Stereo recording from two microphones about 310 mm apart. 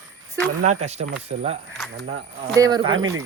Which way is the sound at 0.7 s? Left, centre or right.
Right.